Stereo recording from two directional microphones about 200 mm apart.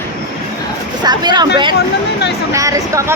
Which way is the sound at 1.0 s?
20° right (ahead or behind).